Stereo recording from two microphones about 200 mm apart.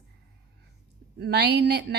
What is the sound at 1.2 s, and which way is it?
Speech, 55° right (ahead or behind).